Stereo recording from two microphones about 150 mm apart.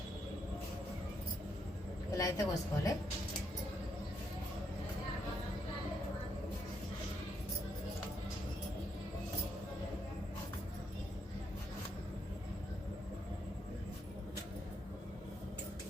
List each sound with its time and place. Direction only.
2.1 s a woman's voice: 25° left (ahead or behind)